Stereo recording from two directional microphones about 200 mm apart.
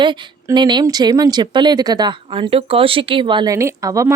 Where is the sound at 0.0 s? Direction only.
20° right (ahead or behind).